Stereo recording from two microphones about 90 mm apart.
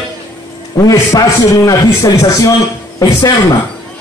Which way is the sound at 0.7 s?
35° left (ahead or behind).